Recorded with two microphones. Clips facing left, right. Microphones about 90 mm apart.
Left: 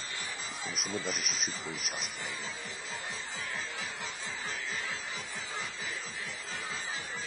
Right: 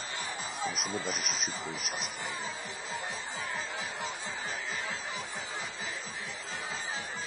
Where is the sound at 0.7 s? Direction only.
Centre (ahead or behind).